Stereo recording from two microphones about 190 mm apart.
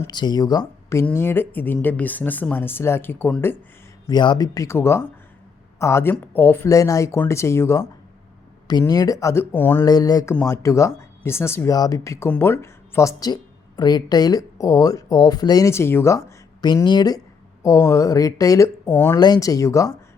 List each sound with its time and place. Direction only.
0.0 s speech: 20° left (ahead or behind)
4.0 s speech: 25° left (ahead or behind)
9.8 s speech: 20° left (ahead or behind)